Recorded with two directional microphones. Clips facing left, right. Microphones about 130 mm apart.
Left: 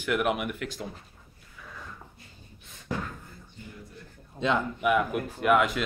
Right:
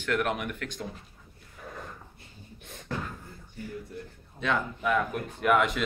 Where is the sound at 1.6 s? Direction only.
50° right (ahead or behind).